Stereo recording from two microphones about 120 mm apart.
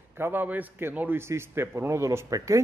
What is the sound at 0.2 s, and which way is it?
A man's voice, 15° right (ahead or behind).